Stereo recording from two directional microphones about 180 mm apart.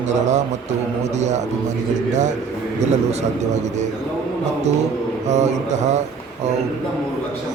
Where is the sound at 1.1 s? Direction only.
40° right (ahead or behind).